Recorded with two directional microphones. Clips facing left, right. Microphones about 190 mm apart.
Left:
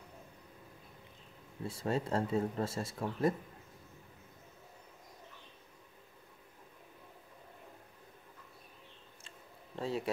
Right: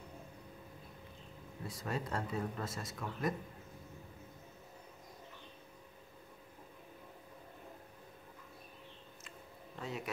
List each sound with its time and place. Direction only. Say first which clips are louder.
1.7 s speech: left 6 dB; 30° left (ahead or behind)
9.8 s a man's voice: left 6 dB; 30° left (ahead or behind)